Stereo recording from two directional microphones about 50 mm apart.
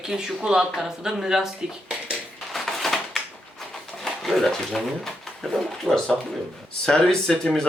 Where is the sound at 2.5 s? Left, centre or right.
Centre.